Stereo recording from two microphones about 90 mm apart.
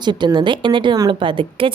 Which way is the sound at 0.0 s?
55° right (ahead or behind).